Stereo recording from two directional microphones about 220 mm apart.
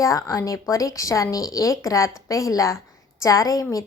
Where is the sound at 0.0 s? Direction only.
15° left (ahead or behind).